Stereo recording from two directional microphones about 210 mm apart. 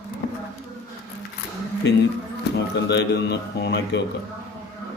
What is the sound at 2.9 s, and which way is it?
A man's voice, 55° left (ahead or behind).